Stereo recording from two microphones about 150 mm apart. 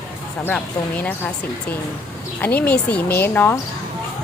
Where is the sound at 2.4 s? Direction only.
10° left (ahead or behind).